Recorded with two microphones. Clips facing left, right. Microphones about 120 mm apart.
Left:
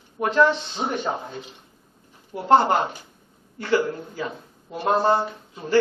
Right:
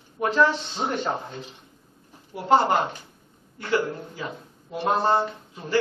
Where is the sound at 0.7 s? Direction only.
10° left (ahead or behind).